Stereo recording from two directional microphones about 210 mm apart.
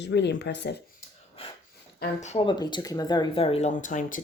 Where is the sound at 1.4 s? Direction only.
25° left (ahead or behind).